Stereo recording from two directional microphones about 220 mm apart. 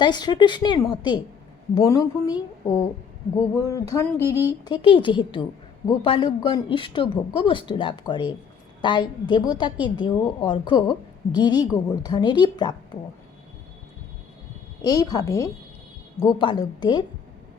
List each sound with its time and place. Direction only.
0.0 s a woman's voice: 20° left (ahead or behind)
14.8 s a woman's voice: 15° left (ahead or behind)